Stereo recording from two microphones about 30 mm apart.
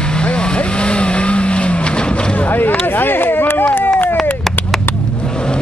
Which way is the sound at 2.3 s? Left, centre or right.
Left.